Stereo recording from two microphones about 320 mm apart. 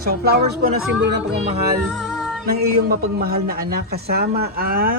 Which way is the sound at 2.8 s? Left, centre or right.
Right.